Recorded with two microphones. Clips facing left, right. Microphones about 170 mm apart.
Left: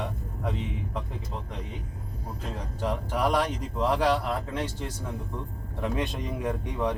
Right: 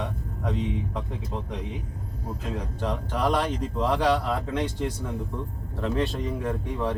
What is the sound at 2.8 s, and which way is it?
Speech, 10° left (ahead or behind).